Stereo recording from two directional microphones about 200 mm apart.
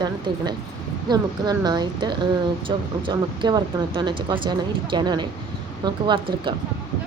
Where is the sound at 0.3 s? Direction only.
20° right (ahead or behind).